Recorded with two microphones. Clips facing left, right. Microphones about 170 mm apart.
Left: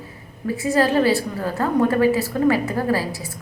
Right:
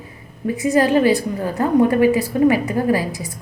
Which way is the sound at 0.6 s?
20° right (ahead or behind).